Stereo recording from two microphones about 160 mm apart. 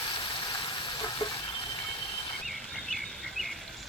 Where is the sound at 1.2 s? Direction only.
25° left (ahead or behind).